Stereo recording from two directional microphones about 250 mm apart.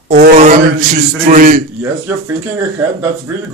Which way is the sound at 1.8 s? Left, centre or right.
Centre.